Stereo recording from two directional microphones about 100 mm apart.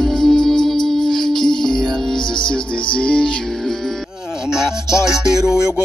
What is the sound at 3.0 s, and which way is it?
Music, 10° left (ahead or behind).